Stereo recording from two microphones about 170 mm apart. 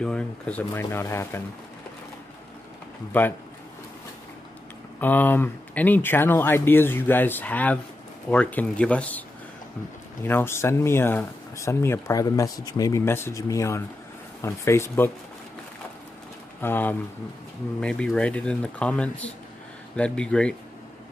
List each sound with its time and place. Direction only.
0.0 s speech: 5° left (ahead or behind)
3.1 s speech: 10° left (ahead or behind)
5.0 s speech: 10° left (ahead or behind)
10.2 s speech: 15° left (ahead or behind)
16.6 s speech: 10° left (ahead or behind)